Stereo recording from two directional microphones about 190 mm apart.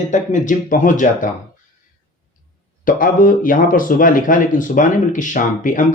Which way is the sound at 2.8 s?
45° left (ahead or behind).